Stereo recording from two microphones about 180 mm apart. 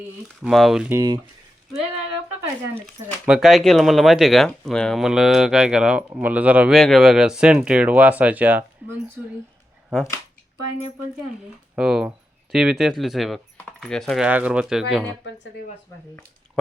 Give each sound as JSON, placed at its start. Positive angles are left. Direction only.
{"t": 0.4, "sound": "speech", "side_deg": 0}
{"t": 0.9, "sound": "speech", "side_deg": -20}
{"t": 3.2, "sound": "speech", "side_deg": -5}
{"t": 11.8, "sound": "speech", "side_deg": -5}
{"t": 14.3, "sound": "speech", "side_deg": -10}